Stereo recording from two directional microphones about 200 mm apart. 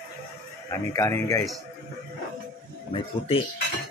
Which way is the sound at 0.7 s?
15° left (ahead or behind).